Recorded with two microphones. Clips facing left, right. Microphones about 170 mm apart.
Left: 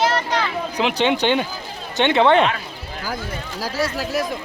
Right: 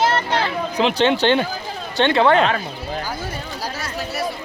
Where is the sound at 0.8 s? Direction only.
15° left (ahead or behind).